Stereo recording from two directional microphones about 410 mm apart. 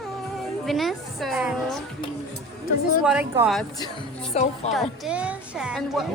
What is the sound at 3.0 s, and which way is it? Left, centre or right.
Speech, centre.